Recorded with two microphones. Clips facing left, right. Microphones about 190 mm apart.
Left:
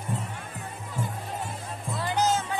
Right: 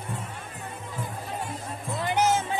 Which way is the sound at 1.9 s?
15° right (ahead or behind).